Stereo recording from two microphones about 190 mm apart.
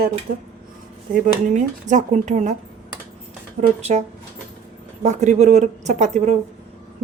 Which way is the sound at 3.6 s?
30° right (ahead or behind).